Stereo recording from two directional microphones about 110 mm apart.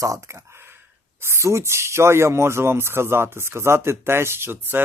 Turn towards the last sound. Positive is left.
turn(degrees=-20)  # may be behind; listen again after turning